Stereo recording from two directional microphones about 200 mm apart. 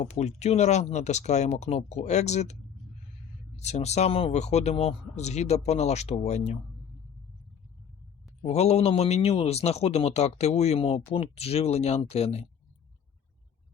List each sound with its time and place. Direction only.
0.0 s speech: 35° left (ahead or behind)
3.6 s speech: 35° left (ahead or behind)
8.4 s speech: 30° left (ahead or behind)